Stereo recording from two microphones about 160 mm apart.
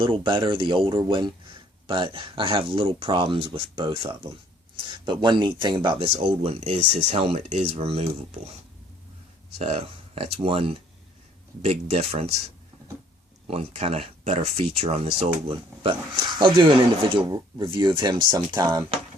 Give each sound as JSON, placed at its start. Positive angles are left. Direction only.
{"t": 0.0, "sound": "speech", "side_deg": -30}
{"t": 9.6, "sound": "speech", "side_deg": -40}
{"t": 13.5, "sound": "speech", "side_deg": -40}